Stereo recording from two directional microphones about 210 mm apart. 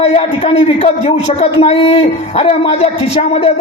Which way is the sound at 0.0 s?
30° left (ahead or behind).